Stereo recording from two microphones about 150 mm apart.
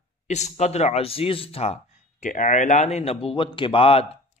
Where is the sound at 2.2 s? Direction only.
55° left (ahead or behind); by 4.1 s 40° left (ahead or behind).